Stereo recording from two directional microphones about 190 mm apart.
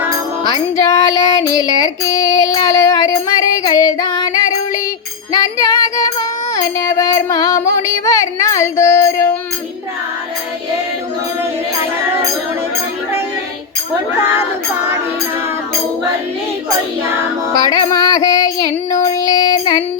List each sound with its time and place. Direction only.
0.4 s child singing: 20° left (ahead or behind)
14.2 s music: 10° right (ahead or behind)
17.9 s child singing: 20° left (ahead or behind)
19.1 s music: 20° left (ahead or behind)